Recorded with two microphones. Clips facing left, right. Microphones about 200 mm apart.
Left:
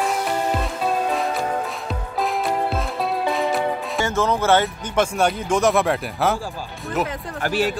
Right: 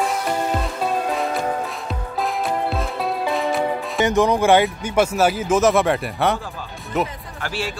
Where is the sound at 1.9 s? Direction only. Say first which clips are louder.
Left 1 dB; centre (ahead or behind).